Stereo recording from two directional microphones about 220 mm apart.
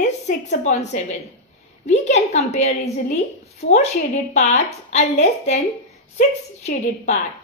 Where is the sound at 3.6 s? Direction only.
60° left (ahead or behind).